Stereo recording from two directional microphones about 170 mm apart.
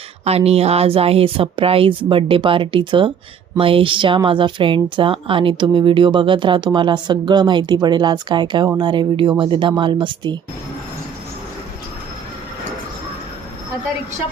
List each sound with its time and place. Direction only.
0.3 s speech: 35° right (ahead or behind)